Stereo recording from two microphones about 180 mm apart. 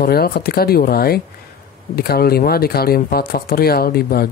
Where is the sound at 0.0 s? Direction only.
60° left (ahead or behind).